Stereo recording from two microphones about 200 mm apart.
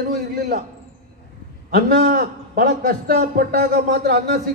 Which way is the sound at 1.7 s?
45° right (ahead or behind).